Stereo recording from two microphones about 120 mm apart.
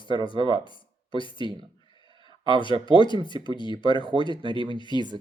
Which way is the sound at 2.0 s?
40° left (ahead or behind).